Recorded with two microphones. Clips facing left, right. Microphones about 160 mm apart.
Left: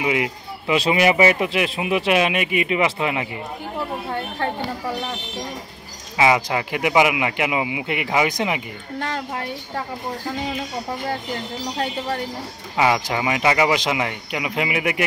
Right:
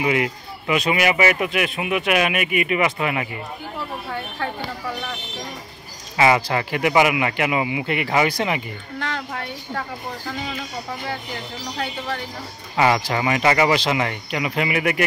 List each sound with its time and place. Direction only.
0.0 s speech: 15° left (ahead or behind)
0.7 s speech: 30° left (ahead or behind)
6.1 s speech: 10° left (ahead or behind)
11.7 s a woman's voice: 35° left (ahead or behind)
12.7 s speech: 10° left (ahead or behind)